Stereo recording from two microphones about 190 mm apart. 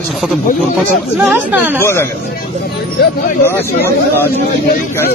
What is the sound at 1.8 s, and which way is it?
Speech, 10° left (ahead or behind).